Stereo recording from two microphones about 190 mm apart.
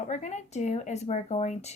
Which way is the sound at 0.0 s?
40° left (ahead or behind).